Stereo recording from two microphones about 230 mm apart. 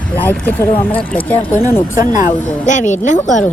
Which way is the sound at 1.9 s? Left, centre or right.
Left.